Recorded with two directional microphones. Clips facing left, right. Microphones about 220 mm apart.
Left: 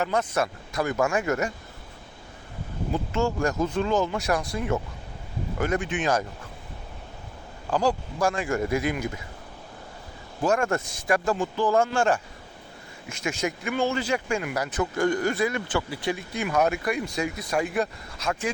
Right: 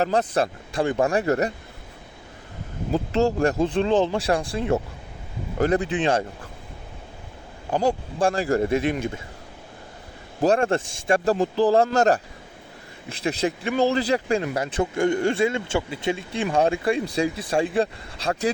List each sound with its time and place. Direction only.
0.0 s speech: 35° right (ahead or behind)
2.9 s speech: 35° right (ahead or behind)
7.7 s a man's voice: 25° right (ahead or behind)
10.4 s a man's voice: 30° right (ahead or behind)